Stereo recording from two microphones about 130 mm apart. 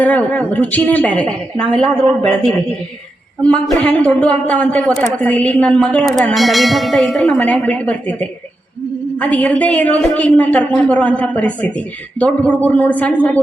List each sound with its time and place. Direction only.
0.0 s a woman's voice: 10° left (ahead or behind)
3.4 s a woman's voice: 10° left (ahead or behind)